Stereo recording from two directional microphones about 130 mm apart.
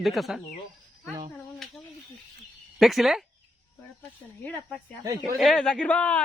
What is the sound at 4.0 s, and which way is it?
Speech, 15° left (ahead or behind).